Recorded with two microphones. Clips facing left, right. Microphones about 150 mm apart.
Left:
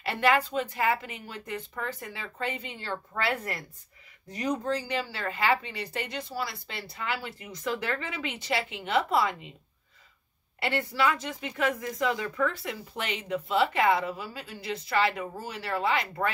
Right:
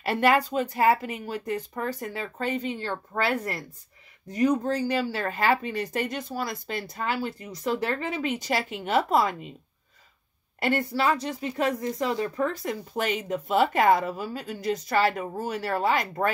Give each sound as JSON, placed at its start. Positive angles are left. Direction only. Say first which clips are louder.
{"t": 0.0, "sound": "speech", "louder": "right 3 dB", "side_deg": -40}
{"t": 10.6, "sound": "speech", "louder": "right 3 dB", "side_deg": -40}